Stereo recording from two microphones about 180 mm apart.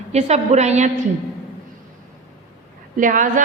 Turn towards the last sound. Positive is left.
turn(degrees=-45)  # may be behind; listen again after turning